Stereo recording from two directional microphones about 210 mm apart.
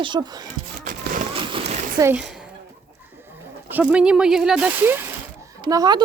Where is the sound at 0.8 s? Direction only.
40° right (ahead or behind).